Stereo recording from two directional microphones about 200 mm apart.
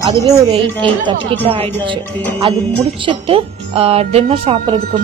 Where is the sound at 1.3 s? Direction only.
25° right (ahead or behind).